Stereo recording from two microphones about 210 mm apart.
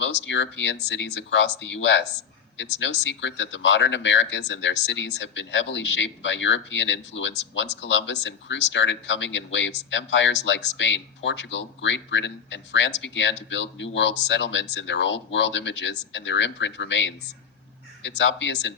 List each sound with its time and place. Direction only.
0.0 s speech: 60° left (ahead or behind)